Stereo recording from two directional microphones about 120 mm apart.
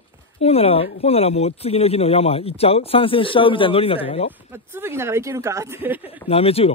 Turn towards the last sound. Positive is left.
turn(degrees=55)  # may be behind; listen again after turning